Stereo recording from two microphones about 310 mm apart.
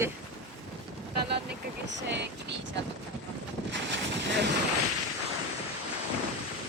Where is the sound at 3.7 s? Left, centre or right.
Right.